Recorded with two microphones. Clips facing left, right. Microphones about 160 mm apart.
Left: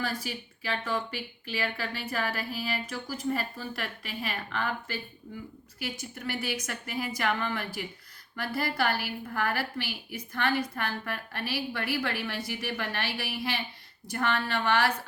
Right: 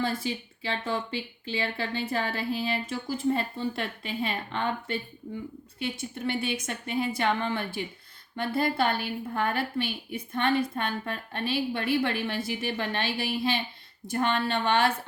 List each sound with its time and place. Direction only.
0.0 s speech: 25° right (ahead or behind)
5.2 s speech: 15° right (ahead or behind)
5.8 s speech: 25° right (ahead or behind)